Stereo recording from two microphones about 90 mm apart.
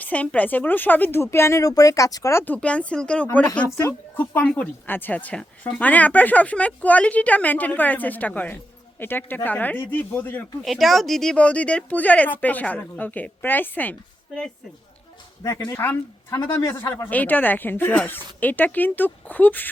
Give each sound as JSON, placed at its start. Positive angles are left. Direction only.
{"t": 0.0, "sound": "speech", "side_deg": 15}
{"t": 2.3, "sound": "a woman's voice", "side_deg": 20}
{"t": 10.6, "sound": "a woman's voice", "side_deg": 0}
{"t": 15.4, "sound": "speech", "side_deg": 35}
{"t": 16.4, "sound": "a man's voice", "side_deg": 50}
{"t": 16.6, "sound": "speech", "side_deg": 30}